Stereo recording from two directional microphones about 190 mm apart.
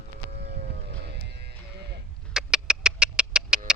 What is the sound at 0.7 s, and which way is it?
Sheep, 60° right (ahead or behind).